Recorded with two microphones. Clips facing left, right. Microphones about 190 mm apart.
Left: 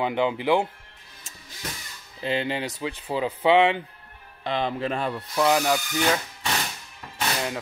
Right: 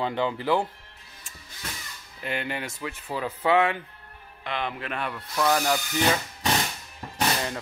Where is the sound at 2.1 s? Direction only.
25° left (ahead or behind).